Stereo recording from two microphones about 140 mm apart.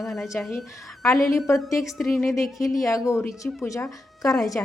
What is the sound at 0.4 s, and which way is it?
Speech, 10° left (ahead or behind).